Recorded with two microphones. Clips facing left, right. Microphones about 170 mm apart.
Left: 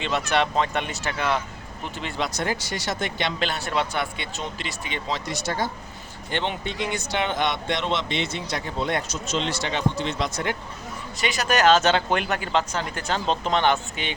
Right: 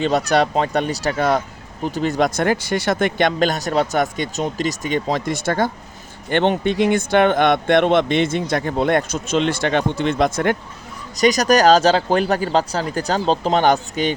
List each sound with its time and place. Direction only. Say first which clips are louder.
0.0 s a man's voice: right 7 dB; 40° right (ahead or behind); by 10.6 s 55° right (ahead or behind)
11.2 s speech: right 8 dB; 40° right (ahead or behind)